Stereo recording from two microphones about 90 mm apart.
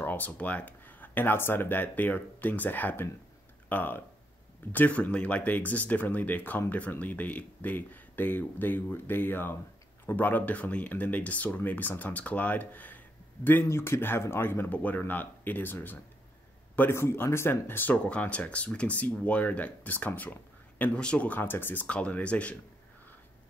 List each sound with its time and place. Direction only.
0.0 s speech: 20° left (ahead or behind)